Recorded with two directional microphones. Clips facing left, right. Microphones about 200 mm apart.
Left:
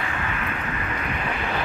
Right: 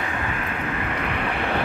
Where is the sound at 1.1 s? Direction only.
60° right (ahead or behind).